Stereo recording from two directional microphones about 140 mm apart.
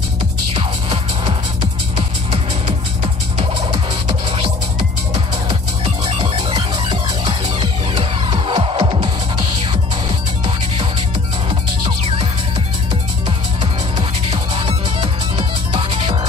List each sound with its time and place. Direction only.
0.6 s music: 40° right (ahead or behind)
11.8 s music: 40° right (ahead or behind)
13.6 s music: 35° right (ahead or behind)